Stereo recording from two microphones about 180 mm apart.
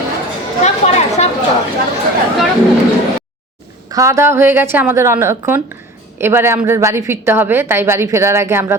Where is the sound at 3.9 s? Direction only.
15° right (ahead or behind).